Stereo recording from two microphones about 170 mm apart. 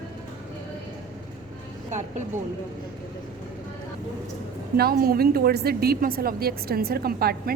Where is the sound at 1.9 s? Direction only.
45° right (ahead or behind).